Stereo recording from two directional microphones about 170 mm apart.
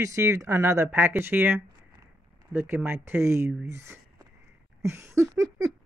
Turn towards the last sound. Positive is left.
turn(degrees=-20)  # may be behind; listen again after turning